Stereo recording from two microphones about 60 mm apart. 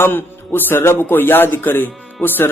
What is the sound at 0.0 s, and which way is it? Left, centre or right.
Speech, left.